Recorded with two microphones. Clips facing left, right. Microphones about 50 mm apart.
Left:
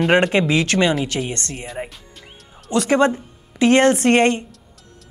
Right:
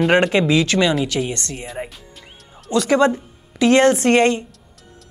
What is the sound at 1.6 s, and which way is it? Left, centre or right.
Speech, centre.